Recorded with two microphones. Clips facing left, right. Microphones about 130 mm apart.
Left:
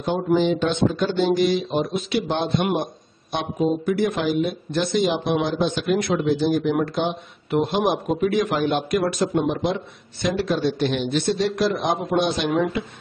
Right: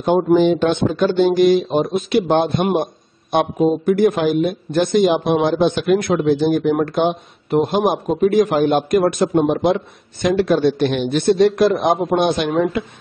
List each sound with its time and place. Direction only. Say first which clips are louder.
0.0 s a man's voice: right 6 dB; 55° right (ahead or behind)